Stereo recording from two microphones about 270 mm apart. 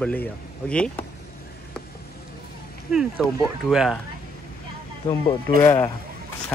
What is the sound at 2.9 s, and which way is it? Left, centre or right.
Speech, centre.